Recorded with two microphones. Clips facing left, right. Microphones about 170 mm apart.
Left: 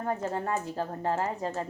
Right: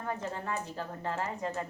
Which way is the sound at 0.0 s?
40° left (ahead or behind).